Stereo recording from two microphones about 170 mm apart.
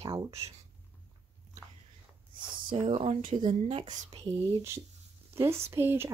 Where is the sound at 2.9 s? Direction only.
40° right (ahead or behind).